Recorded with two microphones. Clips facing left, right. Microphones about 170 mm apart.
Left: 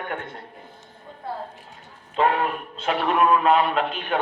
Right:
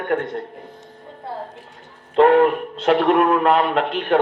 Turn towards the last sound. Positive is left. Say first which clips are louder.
# right 6 dB
turn(degrees=-60)  # may be behind; listen again after turning